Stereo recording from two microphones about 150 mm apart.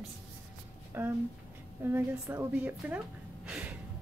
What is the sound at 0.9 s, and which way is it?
Speech, 15° right (ahead or behind).